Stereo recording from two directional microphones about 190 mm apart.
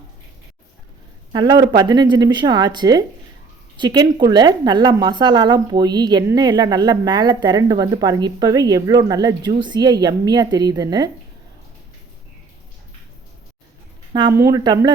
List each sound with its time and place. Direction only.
1.3 s a woman's voice: 20° right (ahead or behind)
14.1 s a woman's voice: 20° right (ahead or behind)